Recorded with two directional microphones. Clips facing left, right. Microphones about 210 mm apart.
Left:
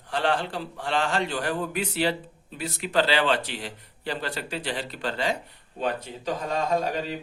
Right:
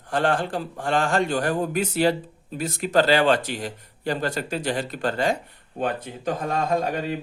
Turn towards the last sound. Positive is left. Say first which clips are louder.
# right 2 dB
turn(degrees=-55)  # may be behind; listen again after turning